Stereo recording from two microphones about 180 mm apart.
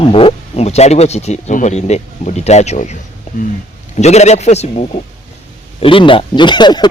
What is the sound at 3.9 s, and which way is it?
A man's voice, 40° left (ahead or behind).